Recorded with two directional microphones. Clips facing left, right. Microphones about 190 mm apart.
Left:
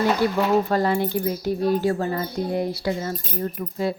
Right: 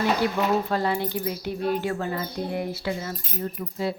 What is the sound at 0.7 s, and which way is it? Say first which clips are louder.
Speech: left 4 dB; 45° left (ahead or behind).